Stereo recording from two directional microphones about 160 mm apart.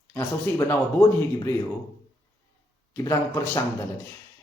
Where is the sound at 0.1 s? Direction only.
10° left (ahead or behind).